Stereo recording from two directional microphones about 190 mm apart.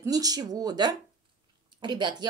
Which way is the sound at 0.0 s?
20° right (ahead or behind).